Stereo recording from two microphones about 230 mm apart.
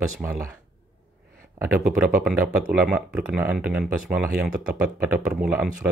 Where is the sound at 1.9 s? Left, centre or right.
Centre.